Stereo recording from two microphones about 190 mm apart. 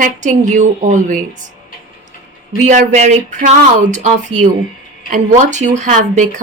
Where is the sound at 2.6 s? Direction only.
40° right (ahead or behind).